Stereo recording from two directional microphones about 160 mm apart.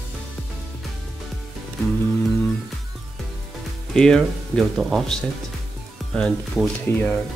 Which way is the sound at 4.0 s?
5° left (ahead or behind).